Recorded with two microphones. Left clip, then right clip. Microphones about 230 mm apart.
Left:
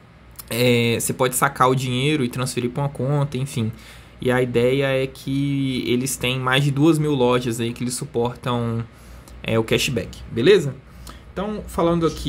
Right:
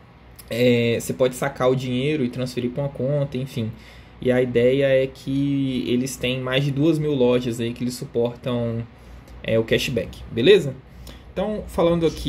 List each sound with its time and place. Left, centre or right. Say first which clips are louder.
0.5 s speech: even; left